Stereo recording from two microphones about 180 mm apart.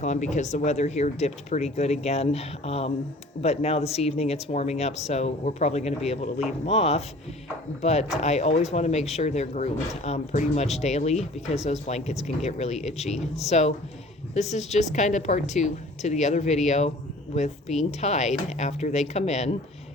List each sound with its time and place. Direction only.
0.0 s speech: 40° left (ahead or behind)